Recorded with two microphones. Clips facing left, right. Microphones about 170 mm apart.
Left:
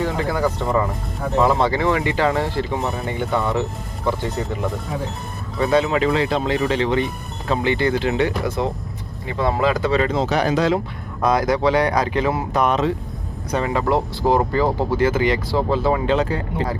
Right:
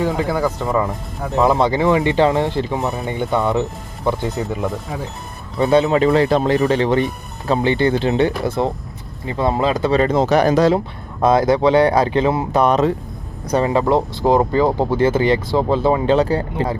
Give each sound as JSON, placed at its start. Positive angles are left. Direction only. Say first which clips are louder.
{"t": 0.0, "sound": "speech", "louder": "right 2 dB", "side_deg": -20}
{"t": 5.5, "sound": "speech", "louder": "right 4 dB", "side_deg": -25}
{"t": 6.1, "sound": "speech", "louder": "right 5 dB", "side_deg": -45}
{"t": 10.0, "sound": "speech", "louder": "right 5 dB", "side_deg": -45}
{"t": 11.2, "sound": "speech", "louder": "right 4 dB", "side_deg": -25}